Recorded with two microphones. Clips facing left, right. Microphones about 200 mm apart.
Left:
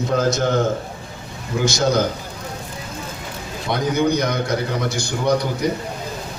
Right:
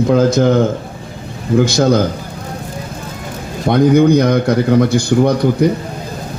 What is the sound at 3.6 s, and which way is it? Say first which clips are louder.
A man's voice: right 10 dB; 55° right (ahead or behind).